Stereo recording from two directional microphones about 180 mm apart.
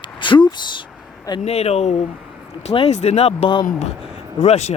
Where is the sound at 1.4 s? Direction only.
35° left (ahead or behind).